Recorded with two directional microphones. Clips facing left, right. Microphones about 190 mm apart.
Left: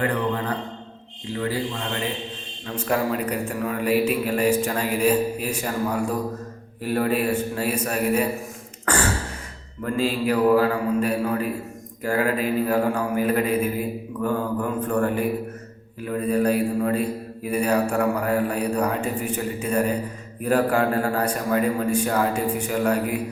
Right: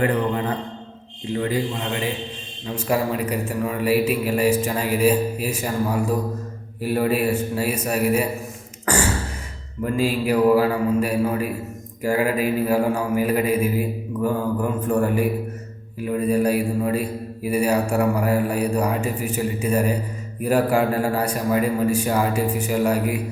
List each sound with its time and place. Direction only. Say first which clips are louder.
0.0 s a sound: right 3 dB; 20° right (ahead or behind)
1.3 s a man's voice: right 3 dB; 20° right (ahead or behind)
2.6 s a man's voice: right 1 dB; 5° right (ahead or behind)
9.8 s a man's voice: right 2 dB; 10° right (ahead or behind)